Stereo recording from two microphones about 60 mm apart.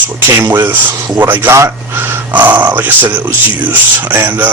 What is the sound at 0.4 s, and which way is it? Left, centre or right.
Speech, right.